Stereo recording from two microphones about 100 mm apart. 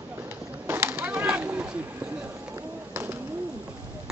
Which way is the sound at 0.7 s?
20° right (ahead or behind).